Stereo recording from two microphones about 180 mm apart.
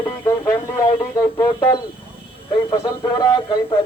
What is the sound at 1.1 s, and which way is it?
Speech, 20° left (ahead or behind).